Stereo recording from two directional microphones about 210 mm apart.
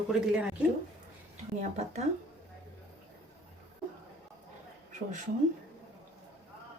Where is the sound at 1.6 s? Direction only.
30° right (ahead or behind).